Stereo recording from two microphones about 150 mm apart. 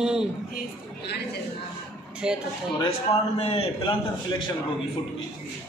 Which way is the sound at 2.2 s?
5° right (ahead or behind).